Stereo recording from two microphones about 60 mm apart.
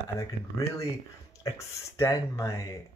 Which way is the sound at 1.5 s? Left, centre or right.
Left.